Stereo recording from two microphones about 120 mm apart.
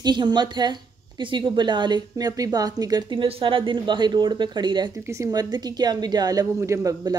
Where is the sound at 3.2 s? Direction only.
50° right (ahead or behind).